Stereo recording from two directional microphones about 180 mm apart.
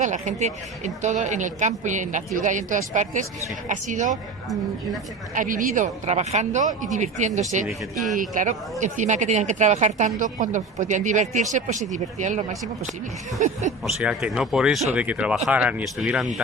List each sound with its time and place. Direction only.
0.0 s speech: 45° right (ahead or behind)
5.3 s speech: 45° right (ahead or behind)
13.8 s speech: 5° right (ahead or behind)